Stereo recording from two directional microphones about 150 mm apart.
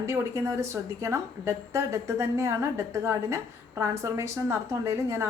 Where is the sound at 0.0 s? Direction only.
20° right (ahead or behind).